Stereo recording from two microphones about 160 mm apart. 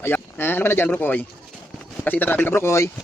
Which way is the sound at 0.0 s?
15° left (ahead or behind).